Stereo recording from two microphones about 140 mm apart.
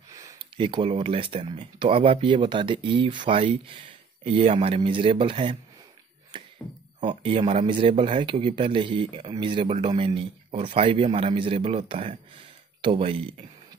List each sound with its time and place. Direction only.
0.1 s a sound: 25° right (ahead or behind)
0.4 s speech: 35° right (ahead or behind)
7.0 s speech: 40° right (ahead or behind)